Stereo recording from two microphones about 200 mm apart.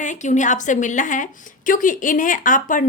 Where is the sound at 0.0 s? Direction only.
40° left (ahead or behind).